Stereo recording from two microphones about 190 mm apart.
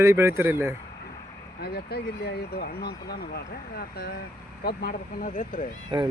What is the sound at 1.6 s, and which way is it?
Speech, 55° left (ahead or behind).